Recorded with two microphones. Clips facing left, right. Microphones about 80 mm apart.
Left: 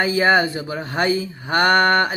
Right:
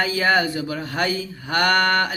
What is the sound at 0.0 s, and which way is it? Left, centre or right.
Speech, left.